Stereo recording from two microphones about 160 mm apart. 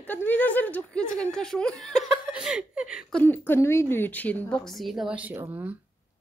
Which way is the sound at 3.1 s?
10° left (ahead or behind).